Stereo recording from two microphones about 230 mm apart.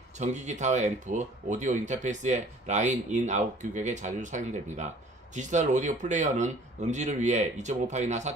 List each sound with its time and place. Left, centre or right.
0.2 s speech: right